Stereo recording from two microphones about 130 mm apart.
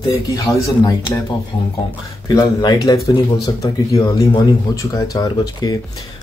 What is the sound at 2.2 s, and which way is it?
Speech, 30° left (ahead or behind).